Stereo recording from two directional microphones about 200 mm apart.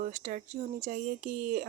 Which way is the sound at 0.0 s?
40° right (ahead or behind).